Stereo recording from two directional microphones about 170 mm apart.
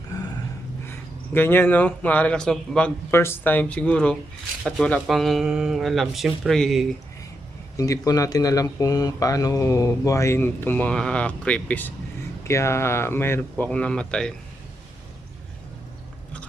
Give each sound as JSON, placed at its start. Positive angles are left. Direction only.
{"t": 0.1, "sound": "a sound", "side_deg": 20}
{"t": 0.9, "sound": "speech", "side_deg": 15}
{"t": 7.8, "sound": "speech", "side_deg": 20}